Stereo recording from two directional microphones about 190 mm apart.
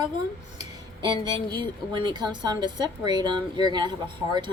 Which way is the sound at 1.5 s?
25° right (ahead or behind).